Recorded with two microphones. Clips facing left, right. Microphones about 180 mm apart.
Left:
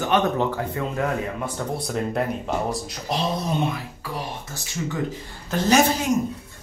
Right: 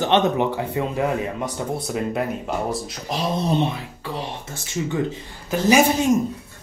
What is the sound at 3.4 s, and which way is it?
Speech, 25° right (ahead or behind).